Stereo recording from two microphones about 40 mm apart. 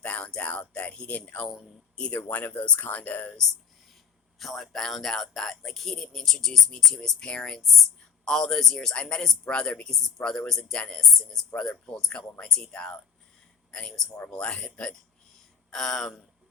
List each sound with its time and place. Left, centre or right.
0.0 s a sound: left
0.3 s speech: left
4.4 s speech: centre
7.2 s speech: left
9.5 s speech: left
15.7 s speech: centre